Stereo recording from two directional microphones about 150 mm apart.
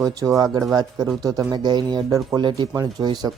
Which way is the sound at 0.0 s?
25° right (ahead or behind).